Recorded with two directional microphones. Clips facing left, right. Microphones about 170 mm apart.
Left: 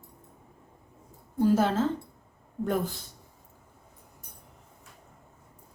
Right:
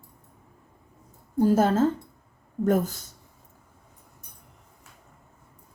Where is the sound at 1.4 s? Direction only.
45° right (ahead or behind).